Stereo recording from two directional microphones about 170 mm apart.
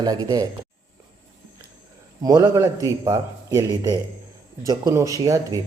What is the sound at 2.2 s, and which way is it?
A man's voice, 20° right (ahead or behind).